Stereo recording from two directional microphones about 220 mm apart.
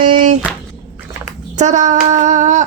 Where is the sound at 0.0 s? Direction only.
35° right (ahead or behind).